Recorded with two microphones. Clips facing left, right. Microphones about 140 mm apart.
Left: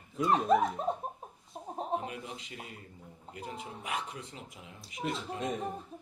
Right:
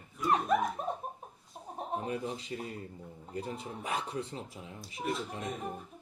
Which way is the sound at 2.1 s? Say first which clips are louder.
Right 7 dB; 35° right (ahead or behind).